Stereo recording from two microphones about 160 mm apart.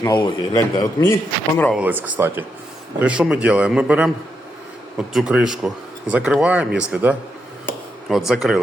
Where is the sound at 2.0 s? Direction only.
10° right (ahead or behind).